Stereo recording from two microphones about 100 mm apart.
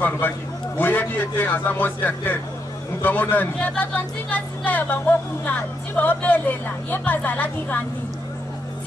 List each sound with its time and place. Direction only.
0.7 s a man's voice: 20° left (ahead or behind)